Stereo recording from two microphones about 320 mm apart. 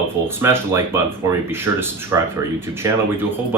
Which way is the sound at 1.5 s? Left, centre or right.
Centre.